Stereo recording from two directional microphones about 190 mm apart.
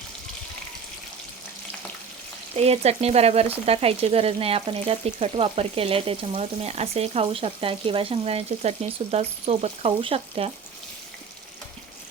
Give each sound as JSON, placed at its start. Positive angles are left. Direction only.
{"t": 2.6, "sound": "frying", "side_deg": -35}